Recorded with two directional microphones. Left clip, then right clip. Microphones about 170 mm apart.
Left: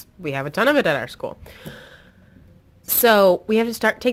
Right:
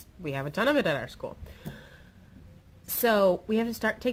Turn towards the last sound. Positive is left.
turn(degrees=35)  # may be behind; listen again after turning